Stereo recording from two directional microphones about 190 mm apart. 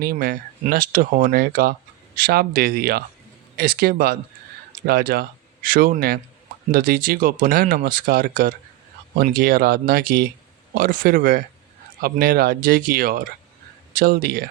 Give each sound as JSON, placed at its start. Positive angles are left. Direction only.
{"t": 0.0, "sound": "speech", "side_deg": -50}